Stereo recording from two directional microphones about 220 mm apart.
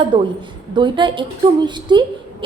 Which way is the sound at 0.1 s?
20° right (ahead or behind).